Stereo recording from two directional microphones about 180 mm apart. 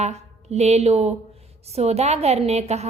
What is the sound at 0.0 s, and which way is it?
A woman's voice, 35° right (ahead or behind).